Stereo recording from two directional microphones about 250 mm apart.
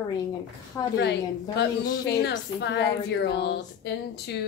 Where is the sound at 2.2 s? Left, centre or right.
Left.